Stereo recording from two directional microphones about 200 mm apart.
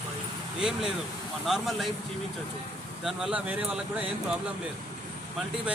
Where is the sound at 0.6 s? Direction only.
5° right (ahead or behind).